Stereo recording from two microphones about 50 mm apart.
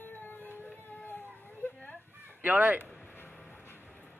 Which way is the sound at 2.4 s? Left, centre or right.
Right.